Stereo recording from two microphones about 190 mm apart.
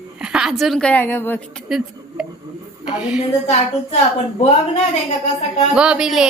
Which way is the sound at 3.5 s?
35° left (ahead or behind).